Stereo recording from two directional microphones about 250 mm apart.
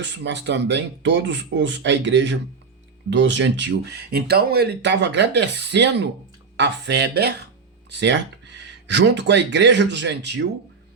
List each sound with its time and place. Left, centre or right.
0.0 s speech: right